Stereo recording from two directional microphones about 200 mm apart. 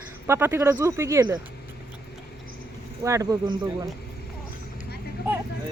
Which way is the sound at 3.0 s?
15° right (ahead or behind).